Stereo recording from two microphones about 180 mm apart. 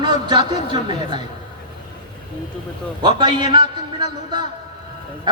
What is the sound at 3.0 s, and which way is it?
A woman's voice, 25° right (ahead or behind).